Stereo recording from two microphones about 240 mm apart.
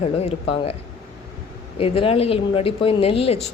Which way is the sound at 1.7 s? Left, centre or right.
Left.